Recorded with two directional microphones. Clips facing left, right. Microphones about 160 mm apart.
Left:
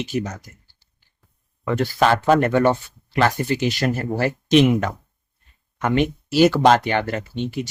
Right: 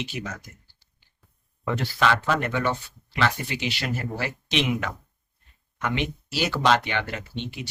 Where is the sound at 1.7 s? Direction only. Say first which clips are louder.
Left 6 dB; 45° left (ahead or behind).